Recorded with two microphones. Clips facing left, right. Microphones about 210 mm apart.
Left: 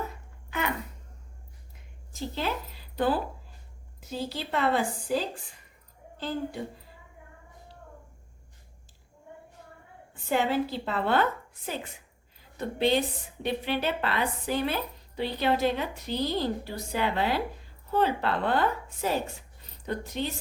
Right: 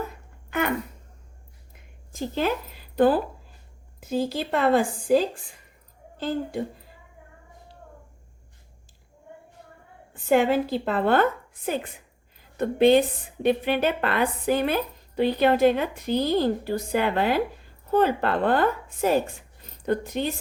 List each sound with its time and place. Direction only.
2.1 s a woman's voice: 50° right (ahead or behind)
10.2 s a woman's voice: 50° right (ahead or behind)